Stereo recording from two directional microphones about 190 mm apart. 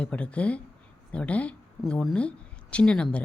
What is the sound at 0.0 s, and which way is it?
Speech, 5° left (ahead or behind).